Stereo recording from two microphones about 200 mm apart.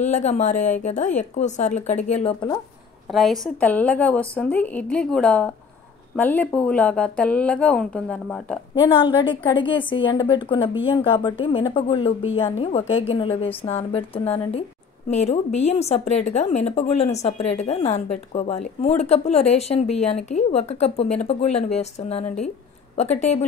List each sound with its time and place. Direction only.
0.0 s a woman's voice: 35° left (ahead or behind)
3.1 s speech: centre (ahead or behind)
8.8 s a woman's voice: 25° left (ahead or behind)